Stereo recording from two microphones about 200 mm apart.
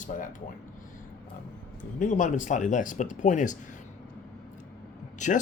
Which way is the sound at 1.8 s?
40° left (ahead or behind).